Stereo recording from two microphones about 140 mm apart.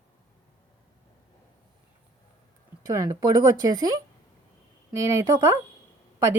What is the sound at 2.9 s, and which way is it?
Speech, 25° right (ahead or behind).